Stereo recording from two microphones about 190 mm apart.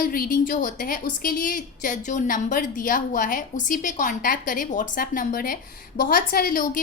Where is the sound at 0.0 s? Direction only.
50° left (ahead or behind).